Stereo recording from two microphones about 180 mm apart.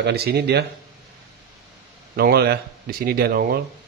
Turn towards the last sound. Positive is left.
turn(degrees=-55)  # may be behind; listen again after turning